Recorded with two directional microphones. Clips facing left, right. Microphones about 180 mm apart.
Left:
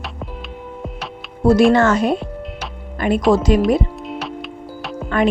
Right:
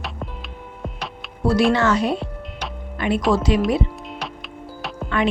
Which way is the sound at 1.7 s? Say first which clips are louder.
Left 4 dB; 50° left (ahead or behind).